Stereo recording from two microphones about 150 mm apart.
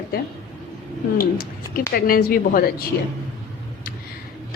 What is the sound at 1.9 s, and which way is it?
A woman's voice, 80° left.